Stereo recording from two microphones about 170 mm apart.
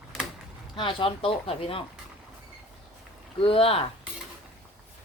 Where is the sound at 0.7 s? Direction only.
30° left (ahead or behind).